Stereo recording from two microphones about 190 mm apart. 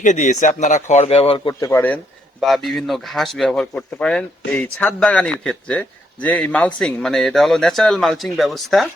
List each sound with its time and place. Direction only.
0.0 s speech: 40° left (ahead or behind)
1.6 s speech: 10° left (ahead or behind)
2.4 s speech: centre (ahead or behind)